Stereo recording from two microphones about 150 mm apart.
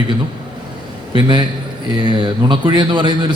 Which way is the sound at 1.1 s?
30° right (ahead or behind).